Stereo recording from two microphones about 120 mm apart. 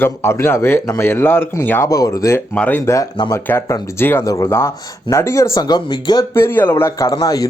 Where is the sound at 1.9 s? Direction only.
30° left (ahead or behind).